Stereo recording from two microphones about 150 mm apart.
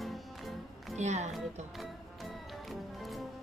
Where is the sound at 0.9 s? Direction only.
50° right (ahead or behind).